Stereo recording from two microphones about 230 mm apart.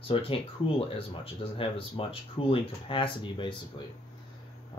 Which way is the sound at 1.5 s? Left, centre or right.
Left.